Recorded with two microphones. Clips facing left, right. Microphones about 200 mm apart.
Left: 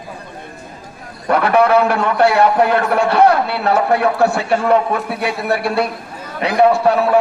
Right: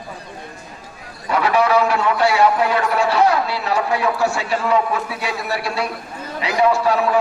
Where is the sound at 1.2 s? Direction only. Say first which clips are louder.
Left 4 dB; 55° left (ahead or behind).